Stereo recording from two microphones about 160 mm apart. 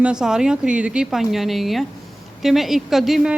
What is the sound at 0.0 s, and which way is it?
Speech, 5° right (ahead or behind).